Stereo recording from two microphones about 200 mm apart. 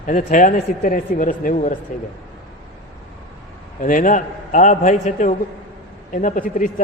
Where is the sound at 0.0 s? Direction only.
40° left (ahead or behind).